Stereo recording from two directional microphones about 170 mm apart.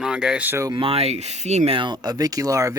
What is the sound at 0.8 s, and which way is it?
Speech, 35° right (ahead or behind).